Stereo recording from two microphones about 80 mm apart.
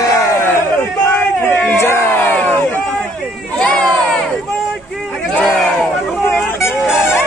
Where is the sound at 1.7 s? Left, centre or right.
Left.